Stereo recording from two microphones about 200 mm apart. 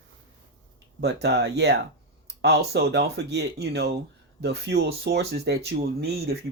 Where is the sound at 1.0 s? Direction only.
55° right (ahead or behind).